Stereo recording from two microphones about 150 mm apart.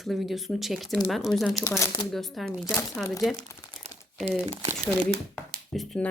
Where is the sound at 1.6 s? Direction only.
20° left (ahead or behind).